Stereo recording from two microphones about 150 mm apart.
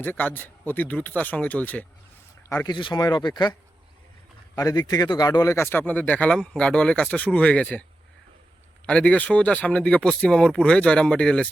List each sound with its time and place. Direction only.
0.0 s a man's voice: 10° left (ahead or behind); by 3.5 s 30° left (ahead or behind)
4.5 s a man's voice: 25° left (ahead or behind); by 7.9 s 10° left (ahead or behind)
8.9 s a man's voice: 5° left (ahead or behind)